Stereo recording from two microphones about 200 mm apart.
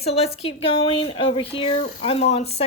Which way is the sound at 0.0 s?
30° left (ahead or behind).